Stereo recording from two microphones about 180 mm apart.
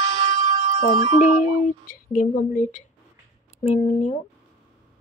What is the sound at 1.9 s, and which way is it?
Speech, 50° left (ahead or behind).